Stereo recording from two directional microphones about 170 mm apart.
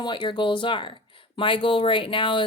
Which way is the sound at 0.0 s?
30° left (ahead or behind).